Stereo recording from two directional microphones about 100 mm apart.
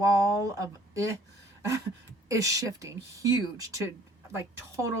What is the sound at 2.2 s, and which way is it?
A woman's voice, 35° right (ahead or behind).